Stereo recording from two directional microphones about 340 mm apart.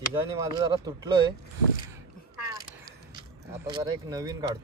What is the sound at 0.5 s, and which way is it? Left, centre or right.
Speech, centre.